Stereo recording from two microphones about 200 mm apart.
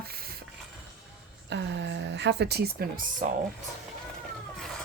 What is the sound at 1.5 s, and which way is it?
Speech, 60° right (ahead or behind).